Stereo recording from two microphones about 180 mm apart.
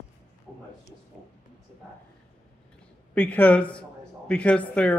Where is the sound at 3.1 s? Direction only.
10° left (ahead or behind).